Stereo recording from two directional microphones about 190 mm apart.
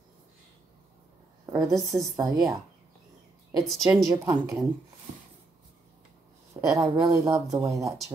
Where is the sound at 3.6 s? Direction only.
Centre (ahead or behind).